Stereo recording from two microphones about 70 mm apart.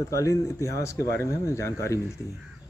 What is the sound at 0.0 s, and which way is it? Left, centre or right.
A man's voice, left.